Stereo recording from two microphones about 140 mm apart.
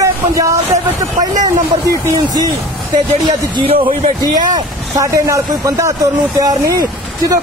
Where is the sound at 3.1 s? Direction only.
40° right (ahead or behind).